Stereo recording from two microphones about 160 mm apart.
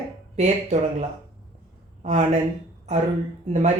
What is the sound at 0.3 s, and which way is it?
Speech, 45° right (ahead or behind).